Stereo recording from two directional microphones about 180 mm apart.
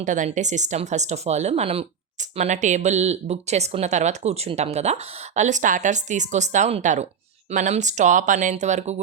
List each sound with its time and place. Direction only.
0.0 s speech: 45° right (ahead or behind)